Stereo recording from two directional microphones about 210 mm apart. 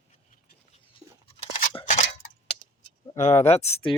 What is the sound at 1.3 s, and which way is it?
Crunch, 35° left (ahead or behind).